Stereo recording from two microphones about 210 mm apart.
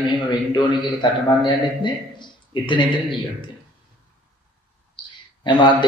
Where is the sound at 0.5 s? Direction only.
20° left (ahead or behind).